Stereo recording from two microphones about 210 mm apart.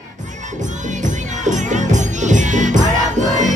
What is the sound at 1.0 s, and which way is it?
Music, 35° right (ahead or behind).